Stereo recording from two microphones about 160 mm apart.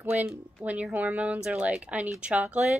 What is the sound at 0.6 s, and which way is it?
A woman's voice, 10° right (ahead or behind).